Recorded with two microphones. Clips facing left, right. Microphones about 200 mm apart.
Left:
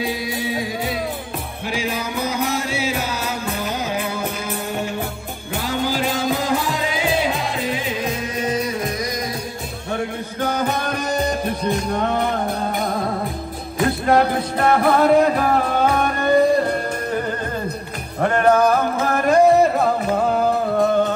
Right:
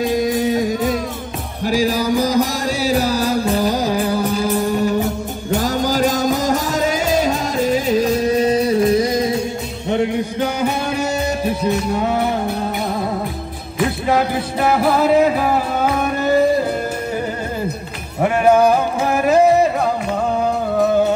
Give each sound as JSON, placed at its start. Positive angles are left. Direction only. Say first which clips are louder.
{"t": 0.0, "sound": "music", "louder": "right 7 dB", "side_deg": -45}
{"t": 1.7, "sound": "music", "louder": "right 9 dB", "side_deg": -35}
{"t": 13.7, "sound": "music", "louder": "left 1 dB", "side_deg": 0}
{"t": 18.2, "sound": "music", "louder": "right 3 dB", "side_deg": -10}